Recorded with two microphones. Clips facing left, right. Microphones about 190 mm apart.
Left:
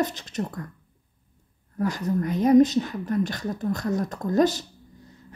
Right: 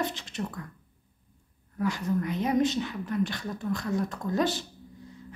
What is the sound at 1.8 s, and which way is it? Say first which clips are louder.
A woman's voice: left 3 dB; 40° left (ahead or behind).